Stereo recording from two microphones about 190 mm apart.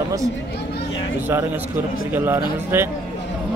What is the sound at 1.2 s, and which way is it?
A man's voice, 10° right (ahead or behind).